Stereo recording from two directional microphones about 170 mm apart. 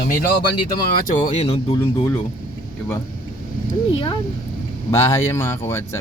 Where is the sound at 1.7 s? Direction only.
20° left (ahead or behind).